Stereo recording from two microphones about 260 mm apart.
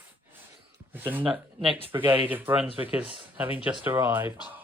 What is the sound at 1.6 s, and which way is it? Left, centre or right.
Speech, centre.